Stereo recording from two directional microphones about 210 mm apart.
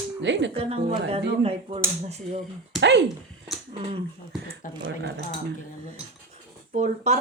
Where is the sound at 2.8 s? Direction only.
55° right (ahead or behind).